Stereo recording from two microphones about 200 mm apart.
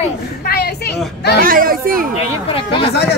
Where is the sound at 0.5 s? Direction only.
55° left (ahead or behind).